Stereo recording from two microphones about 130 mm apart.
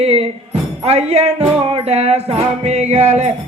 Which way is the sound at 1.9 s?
55° right (ahead or behind).